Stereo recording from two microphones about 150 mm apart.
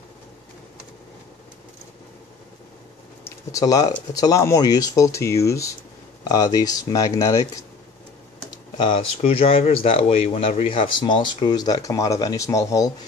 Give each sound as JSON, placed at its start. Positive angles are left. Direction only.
{"t": 3.3, "sound": "speech", "side_deg": 25}
{"t": 8.5, "sound": "speech", "side_deg": 30}